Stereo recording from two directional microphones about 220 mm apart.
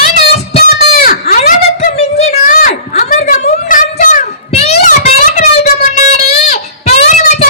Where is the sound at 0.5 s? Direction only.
45° left (ahead or behind).